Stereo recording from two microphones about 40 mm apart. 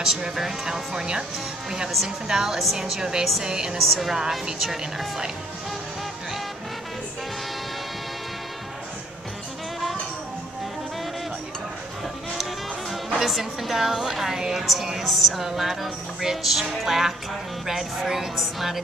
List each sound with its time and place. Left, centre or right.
0.0 s speech: centre
3.7 s speech: centre
4.1 s speech: centre
12.9 s speech: centre